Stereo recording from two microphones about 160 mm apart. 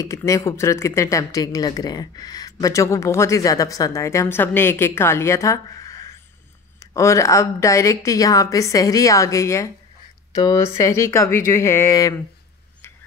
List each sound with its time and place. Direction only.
0.0 s speech: 20° left (ahead or behind)